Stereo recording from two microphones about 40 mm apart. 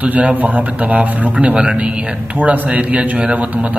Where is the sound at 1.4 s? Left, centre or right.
Right.